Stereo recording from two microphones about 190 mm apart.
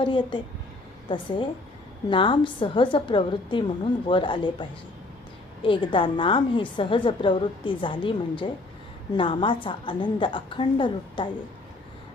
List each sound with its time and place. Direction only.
0.0 s a woman's voice: 25° left (ahead or behind)
5.6 s a woman's voice: 25° left (ahead or behind)